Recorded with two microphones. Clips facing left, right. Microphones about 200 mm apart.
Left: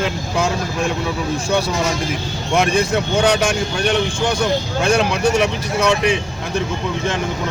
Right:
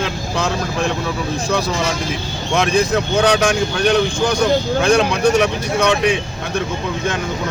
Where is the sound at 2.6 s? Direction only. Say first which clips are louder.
Right 1 dB; 5° left (ahead or behind).